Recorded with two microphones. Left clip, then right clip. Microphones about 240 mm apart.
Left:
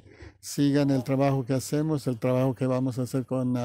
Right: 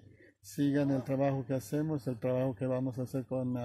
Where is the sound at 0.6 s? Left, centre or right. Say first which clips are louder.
Left 7 dB; left.